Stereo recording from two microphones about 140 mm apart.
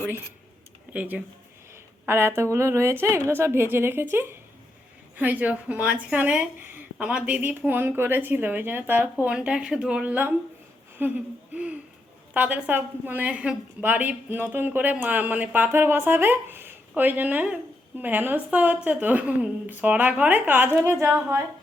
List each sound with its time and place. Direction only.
0.9 s a woman's voice: 10° right (ahead or behind)